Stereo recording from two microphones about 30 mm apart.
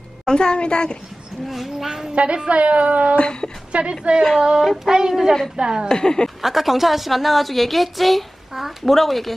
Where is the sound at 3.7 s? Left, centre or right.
Right.